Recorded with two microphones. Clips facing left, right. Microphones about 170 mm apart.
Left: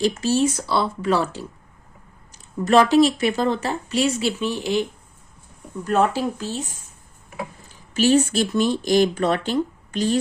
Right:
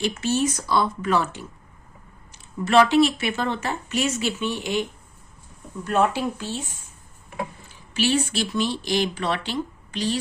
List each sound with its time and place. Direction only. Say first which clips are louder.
0.0 s speech: left 4 dB; 35° left (ahead or behind)